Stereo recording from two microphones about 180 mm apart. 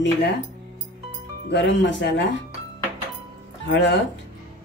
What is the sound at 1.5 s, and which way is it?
Speech, 75° left (ahead or behind).